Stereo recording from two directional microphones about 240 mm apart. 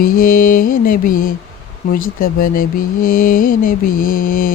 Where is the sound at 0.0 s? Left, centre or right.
Left.